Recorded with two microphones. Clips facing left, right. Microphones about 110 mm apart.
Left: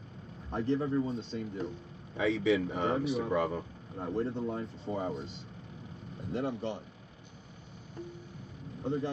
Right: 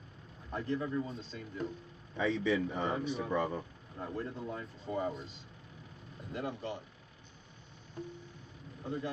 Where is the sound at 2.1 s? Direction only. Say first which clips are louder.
Left 3 dB; 10° left (ahead or behind).